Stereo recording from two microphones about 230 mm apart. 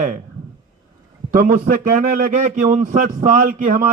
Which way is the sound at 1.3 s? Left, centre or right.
Right.